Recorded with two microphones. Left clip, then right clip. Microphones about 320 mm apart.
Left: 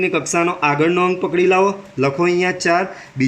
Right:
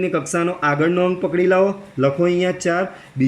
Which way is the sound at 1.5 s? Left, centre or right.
Left.